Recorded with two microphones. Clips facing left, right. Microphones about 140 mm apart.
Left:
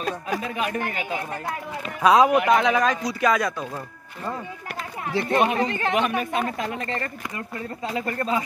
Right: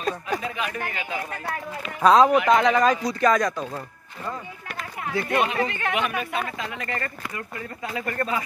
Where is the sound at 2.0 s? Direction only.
10° left (ahead or behind).